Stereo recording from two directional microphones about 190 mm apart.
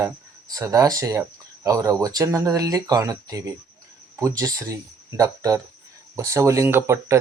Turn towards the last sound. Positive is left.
turn(degrees=-15)  # may be behind; listen again after turning